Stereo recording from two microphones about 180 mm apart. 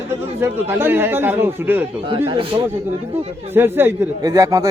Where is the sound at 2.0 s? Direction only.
30° right (ahead or behind).